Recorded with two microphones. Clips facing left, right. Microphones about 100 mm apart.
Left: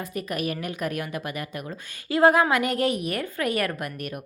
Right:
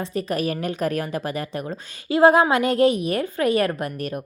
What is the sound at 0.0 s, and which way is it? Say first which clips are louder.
Speech: right 5 dB; 30° right (ahead or behind).